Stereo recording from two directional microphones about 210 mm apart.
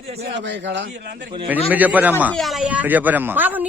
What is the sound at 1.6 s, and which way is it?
A man's voice, 5° right (ahead or behind).